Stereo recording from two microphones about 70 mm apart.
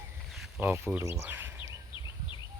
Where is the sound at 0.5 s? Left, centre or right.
Right.